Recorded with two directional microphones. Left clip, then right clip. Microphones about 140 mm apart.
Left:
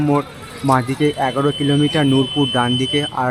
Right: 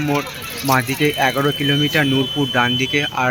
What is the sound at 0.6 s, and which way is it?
Speech, 20° left (ahead or behind).